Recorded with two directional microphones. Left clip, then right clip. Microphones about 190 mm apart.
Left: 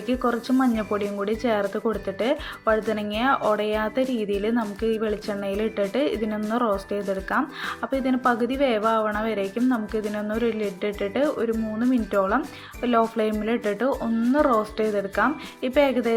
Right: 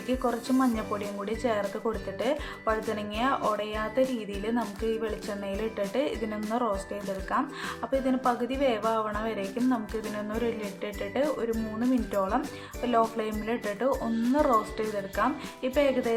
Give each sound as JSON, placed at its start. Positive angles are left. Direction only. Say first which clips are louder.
{"t": 0.1, "sound": "speech", "louder": "left 4 dB", "side_deg": 20}